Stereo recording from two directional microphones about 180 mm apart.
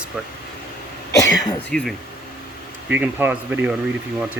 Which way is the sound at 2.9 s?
10° right (ahead or behind).